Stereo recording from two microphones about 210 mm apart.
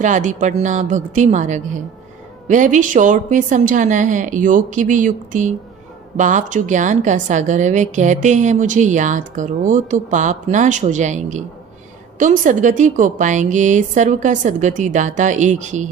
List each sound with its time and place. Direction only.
0.0 s a woman's voice: 35° right (ahead or behind)